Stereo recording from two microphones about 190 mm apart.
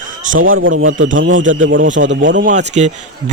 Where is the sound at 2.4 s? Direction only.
40° right (ahead or behind).